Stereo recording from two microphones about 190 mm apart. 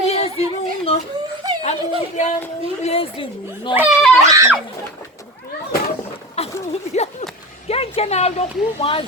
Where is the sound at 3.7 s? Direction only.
10° right (ahead or behind).